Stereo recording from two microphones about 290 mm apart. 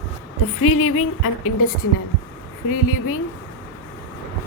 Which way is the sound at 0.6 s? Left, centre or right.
Left.